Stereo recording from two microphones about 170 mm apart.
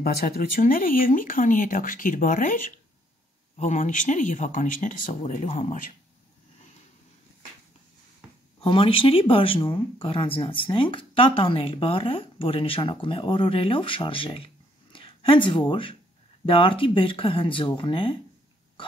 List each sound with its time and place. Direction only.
0.0 s speech: 60° left (ahead or behind); by 5.8 s 40° left (ahead or behind)
8.5 s speech: 35° left (ahead or behind)